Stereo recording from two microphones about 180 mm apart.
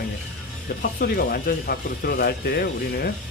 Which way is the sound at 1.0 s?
55° left (ahead or behind).